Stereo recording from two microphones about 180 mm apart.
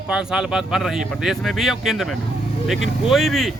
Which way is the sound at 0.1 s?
5° right (ahead or behind).